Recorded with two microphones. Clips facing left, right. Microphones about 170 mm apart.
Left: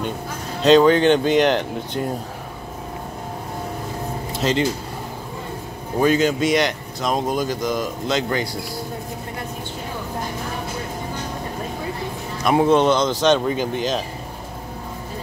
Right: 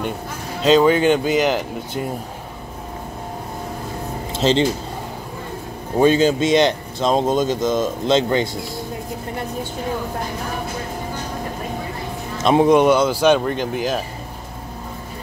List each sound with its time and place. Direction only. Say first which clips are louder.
0.6 s speech: left 1 dB; centre (ahead or behind)
4.3 s speech: right 4 dB; 25° right (ahead or behind)
5.9 s speech: right 3 dB; 30° right (ahead or behind)
12.4 s speech: right 2 dB; 20° right (ahead or behind)
13.4 s speech: even; 5° left (ahead or behind)